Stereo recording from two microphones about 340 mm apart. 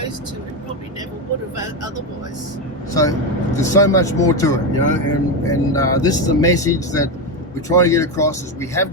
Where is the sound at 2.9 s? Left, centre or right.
Centre.